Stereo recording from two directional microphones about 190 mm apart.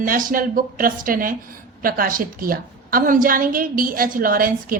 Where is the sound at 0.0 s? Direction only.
45° right (ahead or behind).